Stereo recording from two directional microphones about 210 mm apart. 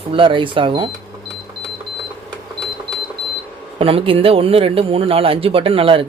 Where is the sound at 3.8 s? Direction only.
25° right (ahead or behind).